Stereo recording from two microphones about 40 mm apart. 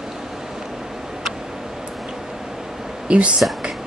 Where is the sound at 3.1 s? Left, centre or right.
Right.